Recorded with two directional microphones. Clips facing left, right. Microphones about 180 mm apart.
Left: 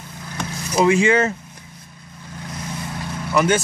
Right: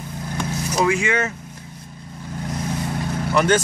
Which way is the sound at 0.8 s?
30° left (ahead or behind).